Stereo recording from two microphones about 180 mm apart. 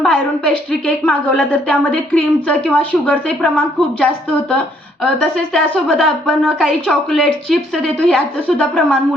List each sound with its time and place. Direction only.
0.0 s a woman's voice: 5° left (ahead or behind)